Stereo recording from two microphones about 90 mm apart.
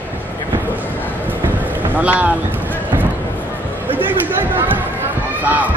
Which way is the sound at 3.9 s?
20° right (ahead or behind).